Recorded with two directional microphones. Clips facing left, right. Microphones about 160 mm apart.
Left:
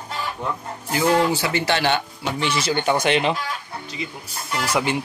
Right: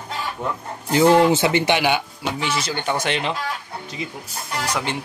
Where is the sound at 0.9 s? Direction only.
25° right (ahead or behind); by 3.3 s centre (ahead or behind).